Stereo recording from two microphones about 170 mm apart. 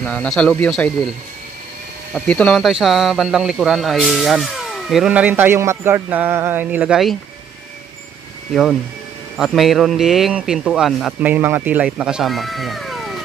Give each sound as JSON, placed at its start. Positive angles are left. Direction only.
{"t": 0.0, "sound": "speech", "side_deg": 5}
{"t": 2.1, "sound": "speech", "side_deg": 5}
{"t": 9.4, "sound": "speech", "side_deg": 0}